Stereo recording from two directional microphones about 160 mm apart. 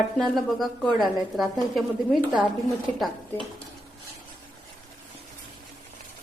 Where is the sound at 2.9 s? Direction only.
Centre (ahead or behind).